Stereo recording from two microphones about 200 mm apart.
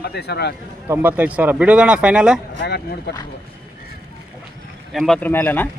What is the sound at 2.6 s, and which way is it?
Speech, 55° left (ahead or behind).